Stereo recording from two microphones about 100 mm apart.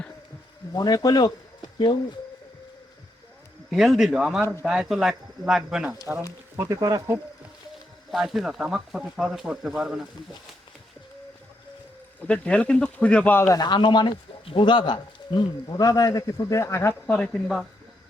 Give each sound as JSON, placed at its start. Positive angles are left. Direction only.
{"t": 0.8, "sound": "speech", "side_deg": 40}
{"t": 3.7, "sound": "speech", "side_deg": 0}
{"t": 6.6, "sound": "speech", "side_deg": -35}
{"t": 8.1, "sound": "speech", "side_deg": 0}
{"t": 12.2, "sound": "speech", "side_deg": 10}
{"t": 13.5, "sound": "speech", "side_deg": 45}
{"t": 17.1, "sound": "speech", "side_deg": 15}